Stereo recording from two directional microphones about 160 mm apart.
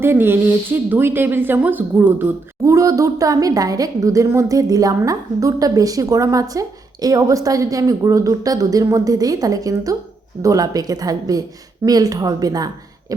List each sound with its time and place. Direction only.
0.0 s a woman's voice: 15° right (ahead or behind)